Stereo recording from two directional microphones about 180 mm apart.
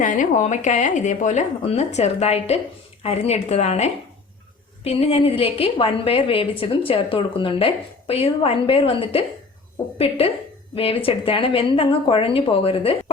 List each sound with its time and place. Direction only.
0.0 s a woman's voice: 45° left (ahead or behind)